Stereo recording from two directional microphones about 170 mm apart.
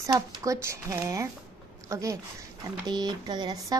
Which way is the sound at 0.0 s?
20° right (ahead or behind).